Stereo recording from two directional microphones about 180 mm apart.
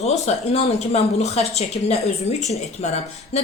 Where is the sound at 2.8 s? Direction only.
40° left (ahead or behind).